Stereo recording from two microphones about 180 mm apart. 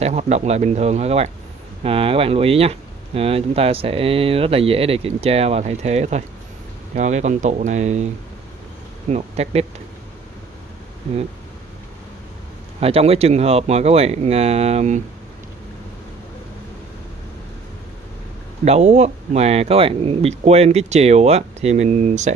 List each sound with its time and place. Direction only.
0.0 s speech: 40° right (ahead or behind)
9.1 s speech: 35° right (ahead or behind)
12.8 s speech: 35° right (ahead or behind)
18.6 s speech: 40° right (ahead or behind)